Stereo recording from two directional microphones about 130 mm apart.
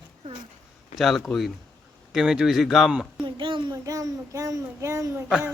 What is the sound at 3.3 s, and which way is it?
A child's voice, 40° right (ahead or behind).